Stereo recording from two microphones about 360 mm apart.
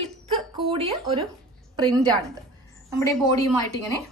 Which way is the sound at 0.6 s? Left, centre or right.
Centre.